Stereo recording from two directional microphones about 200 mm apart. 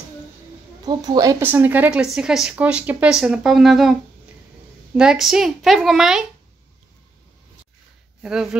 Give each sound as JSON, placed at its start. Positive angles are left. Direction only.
{"t": 0.8, "sound": "a woman's voice", "side_deg": -20}
{"t": 4.9, "sound": "a woman's voice", "side_deg": -5}
{"t": 8.2, "sound": "speech", "side_deg": -5}